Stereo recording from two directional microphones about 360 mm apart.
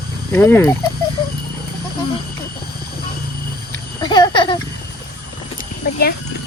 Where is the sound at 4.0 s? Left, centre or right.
Centre.